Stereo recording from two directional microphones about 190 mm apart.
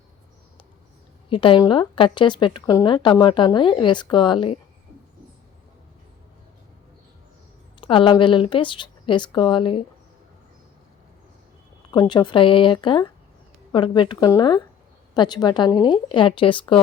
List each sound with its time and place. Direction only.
1.3 s speech: 25° left (ahead or behind)
7.8 s speech: 25° left (ahead or behind)
11.9 s speech: 25° left (ahead or behind)